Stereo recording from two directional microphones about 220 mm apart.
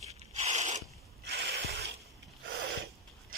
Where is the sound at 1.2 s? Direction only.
50° right (ahead or behind).